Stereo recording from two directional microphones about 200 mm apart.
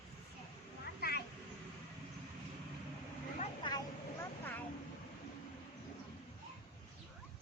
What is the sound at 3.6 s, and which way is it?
Vehicle, 25° left (ahead or behind).